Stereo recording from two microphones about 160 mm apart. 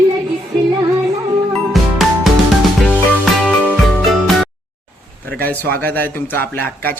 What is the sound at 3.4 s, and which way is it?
Music, centre (ahead or behind).